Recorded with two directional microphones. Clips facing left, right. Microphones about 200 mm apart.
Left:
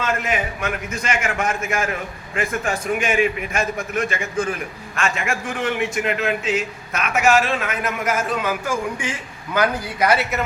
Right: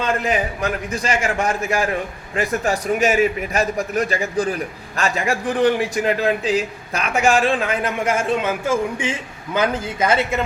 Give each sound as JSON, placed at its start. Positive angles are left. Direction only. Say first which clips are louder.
{"t": 0.0, "sound": "a man's voice", "louder": "right 3 dB", "side_deg": -35}